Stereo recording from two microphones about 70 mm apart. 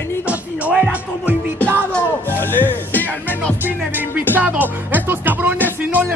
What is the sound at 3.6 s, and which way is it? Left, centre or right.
Music, right.